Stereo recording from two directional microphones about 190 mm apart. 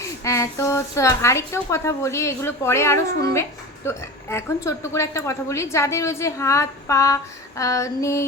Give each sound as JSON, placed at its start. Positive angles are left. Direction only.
{"t": 0.3, "sound": "a woman's voice", "side_deg": 15}